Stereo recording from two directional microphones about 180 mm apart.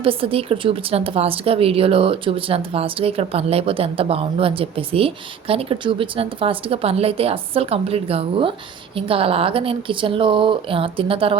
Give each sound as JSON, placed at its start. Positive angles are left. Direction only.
{"t": 0.0, "sound": "a woman's voice", "side_deg": -30}